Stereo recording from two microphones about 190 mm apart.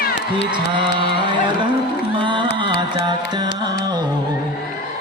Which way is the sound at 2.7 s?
25° right (ahead or behind).